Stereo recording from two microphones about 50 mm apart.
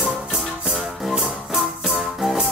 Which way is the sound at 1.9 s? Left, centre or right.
Centre.